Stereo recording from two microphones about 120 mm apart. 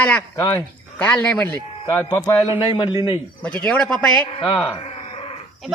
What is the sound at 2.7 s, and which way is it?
Speech, 35° left (ahead or behind).